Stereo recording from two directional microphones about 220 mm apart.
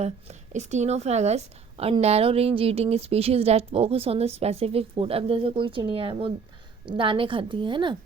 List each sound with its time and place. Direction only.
0.0 s a woman's voice: 30° right (ahead or behind)